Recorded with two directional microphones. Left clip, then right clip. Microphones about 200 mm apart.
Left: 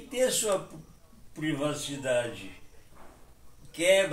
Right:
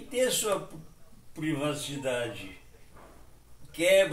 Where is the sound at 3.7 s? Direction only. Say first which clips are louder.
Right 1 dB; centre (ahead or behind).